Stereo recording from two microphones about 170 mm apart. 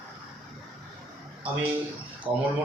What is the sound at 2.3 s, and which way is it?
Speech, 35° right (ahead or behind).